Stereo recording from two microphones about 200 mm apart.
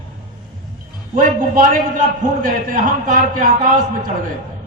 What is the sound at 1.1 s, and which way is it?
A woman's voice, 40° right (ahead or behind).